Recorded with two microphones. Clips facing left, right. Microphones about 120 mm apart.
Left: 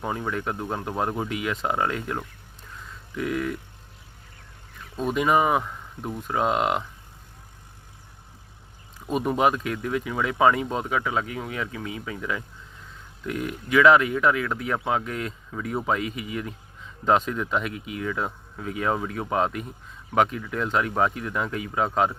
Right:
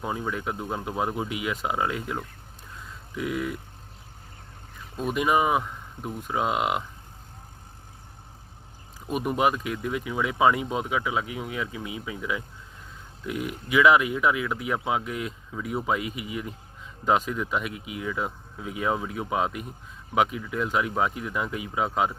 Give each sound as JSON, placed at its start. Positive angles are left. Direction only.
{"t": 0.0, "sound": "speech", "side_deg": -5}
{"t": 5.0, "sound": "speech", "side_deg": -5}
{"t": 9.1, "sound": "speech", "side_deg": -5}